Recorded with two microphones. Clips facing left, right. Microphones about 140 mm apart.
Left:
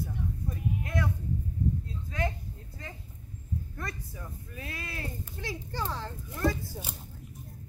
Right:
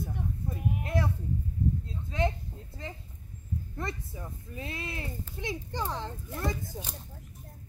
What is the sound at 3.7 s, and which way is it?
Speech, 25° right (ahead or behind).